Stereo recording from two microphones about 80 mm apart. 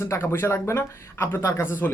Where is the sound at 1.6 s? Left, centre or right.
Left.